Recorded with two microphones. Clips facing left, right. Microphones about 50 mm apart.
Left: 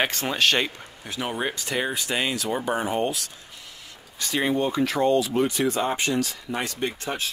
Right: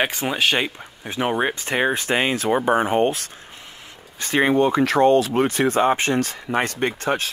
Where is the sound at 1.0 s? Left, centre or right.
Right.